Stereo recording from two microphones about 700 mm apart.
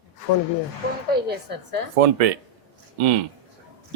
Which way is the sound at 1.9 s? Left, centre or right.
Right.